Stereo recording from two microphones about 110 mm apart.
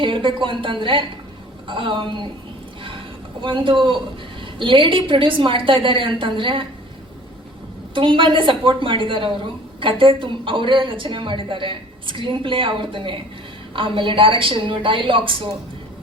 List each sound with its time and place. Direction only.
0.0 s a woman's voice: 50° right (ahead or behind)
3.4 s a woman's voice: 50° right (ahead or behind)
7.9 s a woman's voice: 50° right (ahead or behind)